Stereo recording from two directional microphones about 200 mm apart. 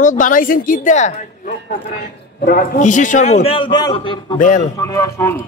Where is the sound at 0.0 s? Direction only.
40° left (ahead or behind); by 4.4 s 25° left (ahead or behind).